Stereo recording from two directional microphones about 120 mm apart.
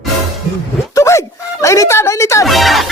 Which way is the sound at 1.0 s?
25° left (ahead or behind).